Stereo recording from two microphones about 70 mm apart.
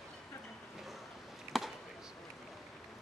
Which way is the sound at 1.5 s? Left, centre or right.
Centre.